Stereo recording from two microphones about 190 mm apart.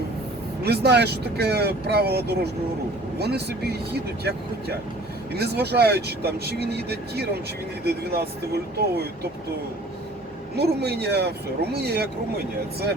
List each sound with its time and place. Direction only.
0.6 s speech: 55° right (ahead or behind)
10.5 s speech: 60° right (ahead or behind)